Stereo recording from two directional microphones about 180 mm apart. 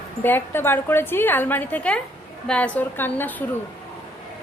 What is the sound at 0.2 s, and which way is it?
A woman's voice, 10° left (ahead or behind).